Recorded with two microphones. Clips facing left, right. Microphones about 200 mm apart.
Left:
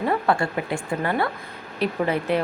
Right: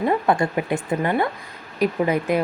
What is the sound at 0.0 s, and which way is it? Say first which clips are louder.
A woman's voice: right 2 dB; 20° right (ahead or behind).